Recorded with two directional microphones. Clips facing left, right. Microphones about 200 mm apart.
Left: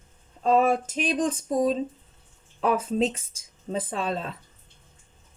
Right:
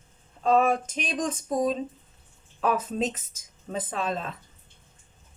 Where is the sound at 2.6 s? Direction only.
30° left (ahead or behind).